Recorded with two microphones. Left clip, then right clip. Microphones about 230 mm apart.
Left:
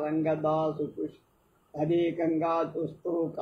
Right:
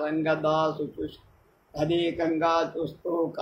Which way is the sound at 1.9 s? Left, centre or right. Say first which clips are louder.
Even; right.